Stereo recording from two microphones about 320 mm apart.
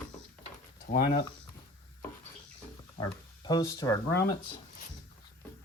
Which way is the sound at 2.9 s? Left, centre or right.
Centre.